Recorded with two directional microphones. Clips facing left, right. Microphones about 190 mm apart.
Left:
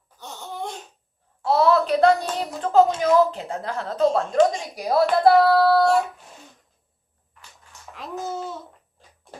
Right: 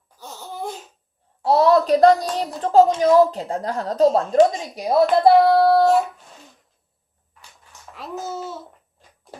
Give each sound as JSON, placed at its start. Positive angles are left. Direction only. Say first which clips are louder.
{"t": 0.2, "sound": "laughter", "louder": "right 1 dB", "side_deg": -5}
{"t": 1.5, "sound": "speech", "louder": "right 3 dB", "side_deg": -35}
{"t": 4.8, "sound": "speech", "louder": "right 2 dB", "side_deg": -20}
{"t": 7.9, "sound": "a child's voice", "louder": "even", "side_deg": -5}